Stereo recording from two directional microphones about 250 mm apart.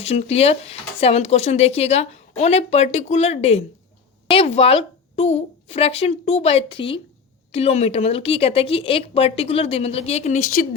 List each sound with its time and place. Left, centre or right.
0.0 s speech: left